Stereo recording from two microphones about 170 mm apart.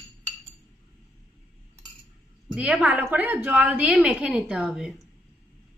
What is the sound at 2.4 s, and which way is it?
A woman's voice, 10° right (ahead or behind).